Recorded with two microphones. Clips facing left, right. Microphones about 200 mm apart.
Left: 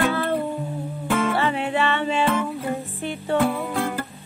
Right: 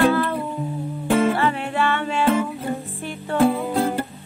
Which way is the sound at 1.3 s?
25° left (ahead or behind).